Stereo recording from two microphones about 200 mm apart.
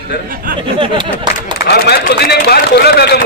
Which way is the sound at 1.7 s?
55° left (ahead or behind).